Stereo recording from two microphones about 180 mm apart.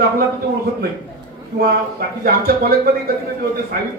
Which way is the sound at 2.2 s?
55° right (ahead or behind).